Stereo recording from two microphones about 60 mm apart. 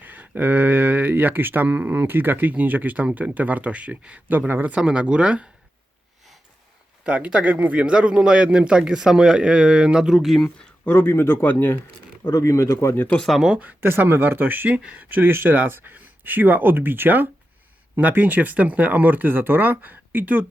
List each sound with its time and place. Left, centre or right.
0.0 s speech: right
4.3 s speech: right
4.7 s a man's voice: centre
7.0 s a man's voice: right; by 10.5 s centre
10.8 s speech: left
12.3 s speech: left
13.1 s speech: centre
13.8 s speech: right